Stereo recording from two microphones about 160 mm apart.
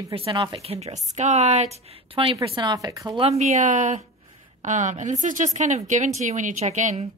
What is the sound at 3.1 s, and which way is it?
A woman's voice, 40° right (ahead or behind).